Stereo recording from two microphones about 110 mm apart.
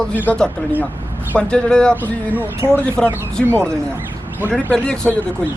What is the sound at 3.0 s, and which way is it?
Speech, 5° left (ahead or behind).